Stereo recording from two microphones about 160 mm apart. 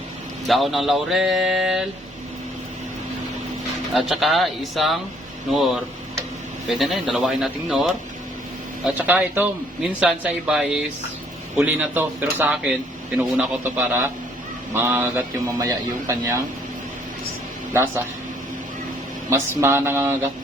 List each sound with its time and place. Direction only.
0.4 s speech: centre (ahead or behind)
3.9 s a man's voice: centre (ahead or behind); by 15.7 s 20° right (ahead or behind)
19.3 s a man's voice: 15° right (ahead or behind)